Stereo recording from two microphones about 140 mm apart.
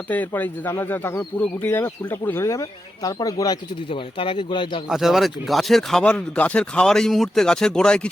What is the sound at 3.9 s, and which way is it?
Speech, 40° left (ahead or behind).